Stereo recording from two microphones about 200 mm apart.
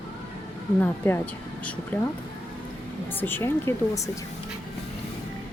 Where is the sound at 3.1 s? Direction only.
10° left (ahead or behind).